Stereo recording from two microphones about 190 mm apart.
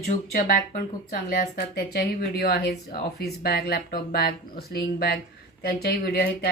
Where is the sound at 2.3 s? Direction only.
55° left (ahead or behind).